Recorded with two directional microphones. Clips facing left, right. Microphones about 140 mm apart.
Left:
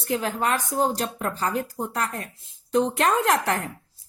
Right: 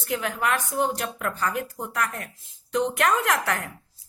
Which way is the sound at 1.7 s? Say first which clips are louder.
Left 1 dB; 30° left (ahead or behind).